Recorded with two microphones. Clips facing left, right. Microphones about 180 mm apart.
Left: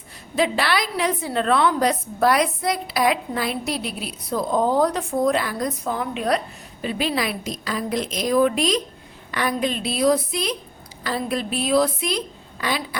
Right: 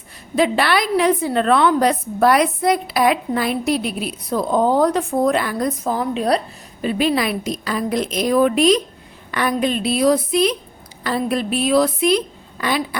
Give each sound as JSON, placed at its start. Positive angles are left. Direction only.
{"t": 0.3, "sound": "a woman's voice", "side_deg": -55}
{"t": 5.9, "sound": "a woman's voice", "side_deg": -35}
{"t": 6.8, "sound": "a woman's voice", "side_deg": -55}